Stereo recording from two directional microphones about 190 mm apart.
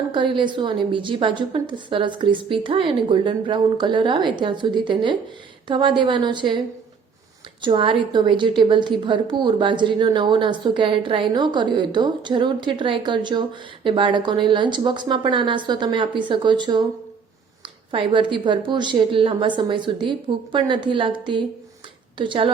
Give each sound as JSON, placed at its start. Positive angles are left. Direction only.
{"t": 0.1, "sound": "a woman's voice", "side_deg": -25}
{"t": 7.6, "sound": "a woman's voice", "side_deg": -25}
{"t": 17.9, "sound": "a woman's voice", "side_deg": -25}